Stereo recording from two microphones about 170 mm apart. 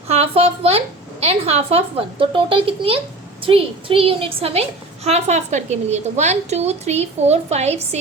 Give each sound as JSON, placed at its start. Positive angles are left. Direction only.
{"t": 0.1, "sound": "a woman's voice", "side_deg": -35}